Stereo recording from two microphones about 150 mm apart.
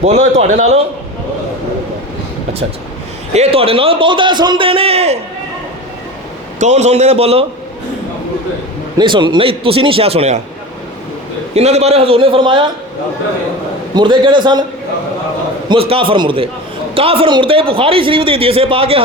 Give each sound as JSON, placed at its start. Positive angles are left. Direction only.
{"t": 0.0, "sound": "a man's voice", "side_deg": -50}
{"t": 3.3, "sound": "speech", "side_deg": -40}
{"t": 6.6, "sound": "a man's voice", "side_deg": -50}
{"t": 9.0, "sound": "speech", "side_deg": -30}
{"t": 11.5, "sound": "speech", "side_deg": -45}
{"t": 13.9, "sound": "speech", "side_deg": -30}
{"t": 15.7, "sound": "speech", "side_deg": -35}